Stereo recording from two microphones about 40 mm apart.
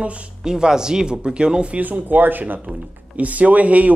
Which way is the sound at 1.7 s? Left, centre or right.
Right.